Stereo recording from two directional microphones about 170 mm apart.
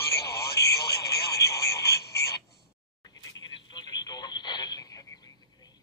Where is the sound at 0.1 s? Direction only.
70° left (ahead or behind).